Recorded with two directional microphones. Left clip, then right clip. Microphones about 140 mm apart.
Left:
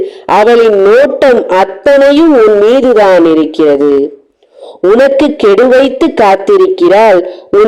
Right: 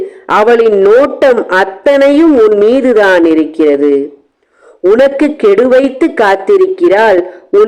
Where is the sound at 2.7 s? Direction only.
30° left (ahead or behind).